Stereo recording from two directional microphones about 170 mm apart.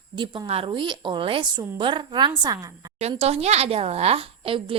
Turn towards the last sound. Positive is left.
turn(degrees=-35)  # may be behind; listen again after turning